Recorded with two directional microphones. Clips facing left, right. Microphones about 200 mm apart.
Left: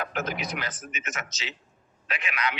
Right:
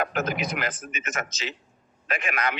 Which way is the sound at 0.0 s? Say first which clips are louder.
Right 4 dB; 50° right (ahead or behind).